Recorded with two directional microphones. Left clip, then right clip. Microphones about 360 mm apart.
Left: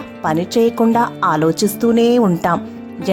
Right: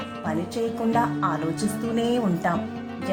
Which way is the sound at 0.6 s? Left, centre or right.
Left.